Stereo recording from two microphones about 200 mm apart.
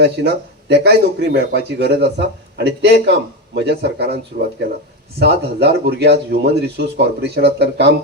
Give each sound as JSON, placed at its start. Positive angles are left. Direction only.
{"t": 0.0, "sound": "speech", "side_deg": -55}